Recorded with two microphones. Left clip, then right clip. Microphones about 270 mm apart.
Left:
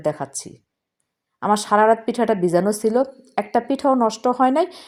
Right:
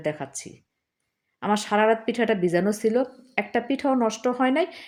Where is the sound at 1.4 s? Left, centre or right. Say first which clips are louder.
Left 6 dB; centre.